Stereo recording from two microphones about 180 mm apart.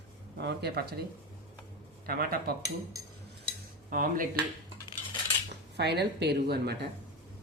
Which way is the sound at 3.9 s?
50° right (ahead or behind).